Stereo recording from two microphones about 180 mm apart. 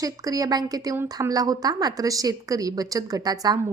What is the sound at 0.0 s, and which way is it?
A woman's voice, 20° right (ahead or behind).